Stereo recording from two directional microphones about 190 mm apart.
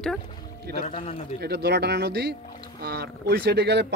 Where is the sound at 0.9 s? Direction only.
30° left (ahead or behind).